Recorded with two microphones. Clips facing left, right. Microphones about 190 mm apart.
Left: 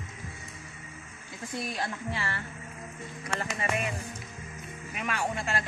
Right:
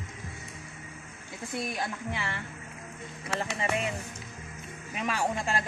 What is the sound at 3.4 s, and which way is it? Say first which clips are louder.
Speech: right 2 dB; 30° right (ahead or behind).